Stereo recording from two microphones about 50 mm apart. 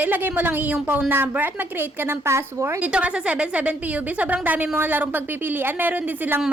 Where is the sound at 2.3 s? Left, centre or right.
Right.